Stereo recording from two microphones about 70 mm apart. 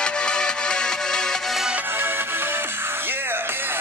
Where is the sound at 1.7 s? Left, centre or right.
Right.